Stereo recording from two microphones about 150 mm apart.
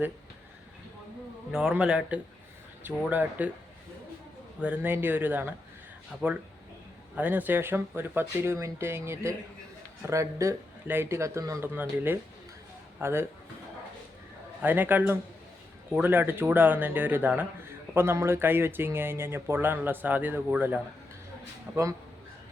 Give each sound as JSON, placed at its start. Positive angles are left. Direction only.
{"t": 1.5, "sound": "speech", "side_deg": -5}
{"t": 4.6, "sound": "speech", "side_deg": -10}
{"t": 7.2, "sound": "speech", "side_deg": -10}
{"t": 14.6, "sound": "speech", "side_deg": -10}
{"t": 21.7, "sound": "speech", "side_deg": -20}